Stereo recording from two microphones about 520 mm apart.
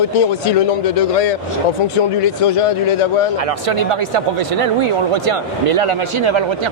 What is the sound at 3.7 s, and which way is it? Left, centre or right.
Speech, right.